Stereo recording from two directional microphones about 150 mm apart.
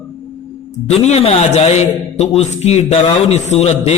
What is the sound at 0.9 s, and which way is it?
A man's voice, 45° left (ahead or behind).